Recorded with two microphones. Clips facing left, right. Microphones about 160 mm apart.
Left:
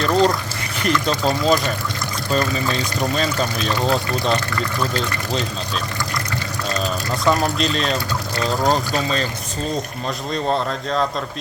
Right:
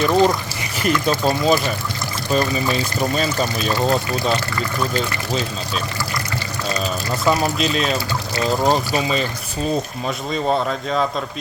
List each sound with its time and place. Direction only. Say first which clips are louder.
0.0 s liquid: right 1 dB; 5° right (ahead or behind)
0.8 s speech: right 1 dB; 5° right (ahead or behind)
10.3 s speech: right 1 dB; 5° right (ahead or behind)